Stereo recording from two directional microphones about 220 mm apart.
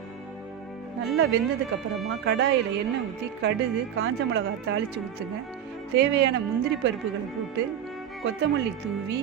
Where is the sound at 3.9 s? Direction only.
60° right (ahead or behind).